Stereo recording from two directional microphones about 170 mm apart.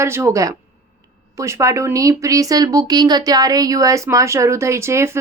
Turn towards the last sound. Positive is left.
turn(degrees=-15)  # may be behind; listen again after turning